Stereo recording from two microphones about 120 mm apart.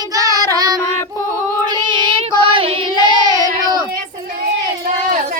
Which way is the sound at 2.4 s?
45° right (ahead or behind).